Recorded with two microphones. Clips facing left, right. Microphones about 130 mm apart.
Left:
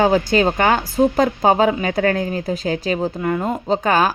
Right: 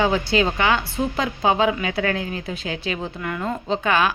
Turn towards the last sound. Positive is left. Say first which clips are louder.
# left 4 dB
turn(degrees=40)  # may be behind; listen again after turning